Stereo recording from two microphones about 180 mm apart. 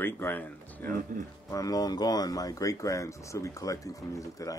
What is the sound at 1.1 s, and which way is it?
Speech, 50° right (ahead or behind).